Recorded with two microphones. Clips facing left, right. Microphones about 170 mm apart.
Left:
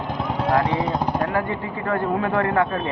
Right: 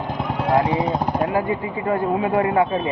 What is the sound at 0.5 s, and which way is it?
Speech, 15° right (ahead or behind).